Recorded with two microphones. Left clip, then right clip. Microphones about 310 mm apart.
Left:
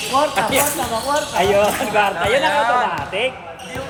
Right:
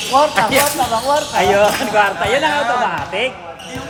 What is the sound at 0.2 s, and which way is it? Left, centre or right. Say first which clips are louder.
Speech: right 4 dB; right.